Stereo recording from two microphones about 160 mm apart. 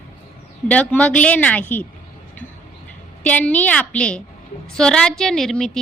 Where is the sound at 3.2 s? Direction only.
10° left (ahead or behind).